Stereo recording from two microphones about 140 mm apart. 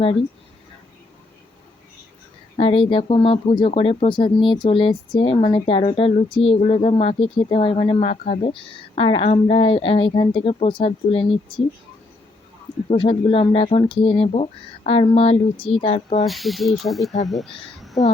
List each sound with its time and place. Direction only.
2.6 s speech: 45° left (ahead or behind)
13.0 s speech: 40° left (ahead or behind)
16.2 s a woman's voice: centre (ahead or behind)